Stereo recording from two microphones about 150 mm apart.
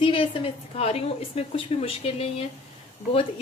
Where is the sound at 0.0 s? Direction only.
35° left (ahead or behind).